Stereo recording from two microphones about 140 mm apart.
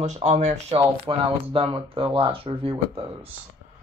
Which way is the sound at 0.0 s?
55° right (ahead or behind).